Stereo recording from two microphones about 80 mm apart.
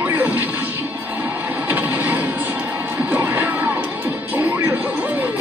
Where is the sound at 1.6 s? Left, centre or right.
Centre.